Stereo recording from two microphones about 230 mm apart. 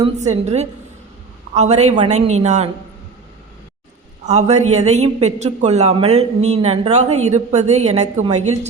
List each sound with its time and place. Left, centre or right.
0.4 s a woman's voice: right
4.2 s a man's voice: right